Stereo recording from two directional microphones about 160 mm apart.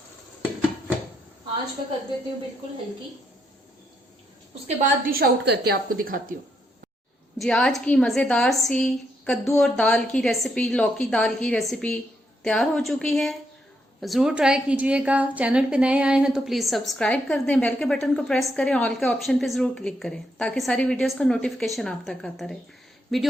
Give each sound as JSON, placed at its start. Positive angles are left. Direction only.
{"t": 4.8, "sound": "a woman's voice", "side_deg": -65}
{"t": 7.3, "sound": "a woman's voice", "side_deg": 5}